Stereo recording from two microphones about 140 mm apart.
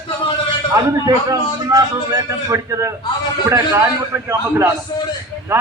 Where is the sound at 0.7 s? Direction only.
25° right (ahead or behind).